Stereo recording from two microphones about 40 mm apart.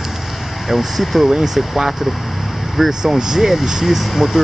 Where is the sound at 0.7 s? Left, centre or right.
Centre.